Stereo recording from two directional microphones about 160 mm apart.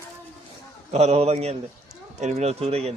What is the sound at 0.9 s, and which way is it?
Speech, 40° right (ahead or behind).